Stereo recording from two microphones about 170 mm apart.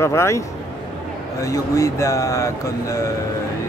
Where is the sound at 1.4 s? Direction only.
20° left (ahead or behind).